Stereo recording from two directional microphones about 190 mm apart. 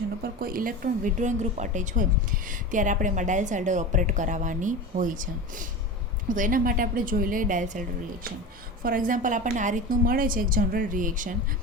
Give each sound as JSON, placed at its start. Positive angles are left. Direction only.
{"t": 0.2, "sound": "a woman's voice", "side_deg": -50}